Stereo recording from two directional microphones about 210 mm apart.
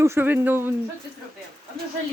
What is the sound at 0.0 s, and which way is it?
Speech, 10° right (ahead or behind).